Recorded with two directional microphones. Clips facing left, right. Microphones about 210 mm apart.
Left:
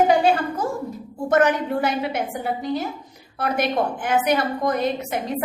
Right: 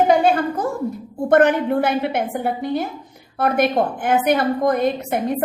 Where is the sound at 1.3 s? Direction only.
55° right (ahead or behind).